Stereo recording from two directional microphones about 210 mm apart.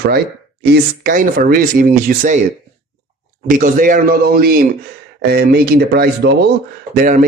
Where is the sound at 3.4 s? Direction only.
40° right (ahead or behind).